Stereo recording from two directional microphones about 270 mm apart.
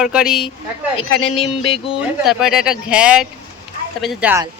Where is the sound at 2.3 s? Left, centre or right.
Centre.